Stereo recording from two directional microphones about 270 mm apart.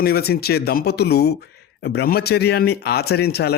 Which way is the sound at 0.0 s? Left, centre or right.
Left.